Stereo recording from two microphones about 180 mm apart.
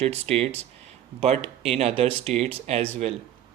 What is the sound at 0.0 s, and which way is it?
Speech, 35° right (ahead or behind).